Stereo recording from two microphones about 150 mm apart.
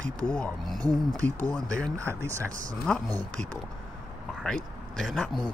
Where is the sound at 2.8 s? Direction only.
5° left (ahead or behind).